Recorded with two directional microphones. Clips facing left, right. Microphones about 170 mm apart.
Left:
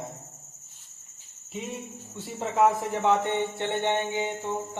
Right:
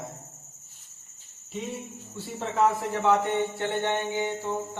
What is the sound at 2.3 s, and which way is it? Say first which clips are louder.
Speech: left 2 dB; 20° left (ahead or behind).